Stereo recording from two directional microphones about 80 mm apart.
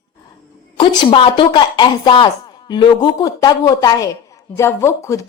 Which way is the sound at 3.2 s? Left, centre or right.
Left.